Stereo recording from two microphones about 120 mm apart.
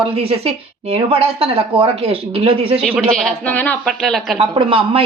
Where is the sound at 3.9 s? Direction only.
Centre (ahead or behind).